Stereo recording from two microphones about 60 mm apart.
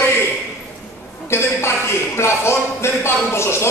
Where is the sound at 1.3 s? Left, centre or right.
Left.